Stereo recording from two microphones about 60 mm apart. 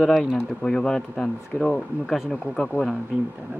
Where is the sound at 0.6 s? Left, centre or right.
Centre.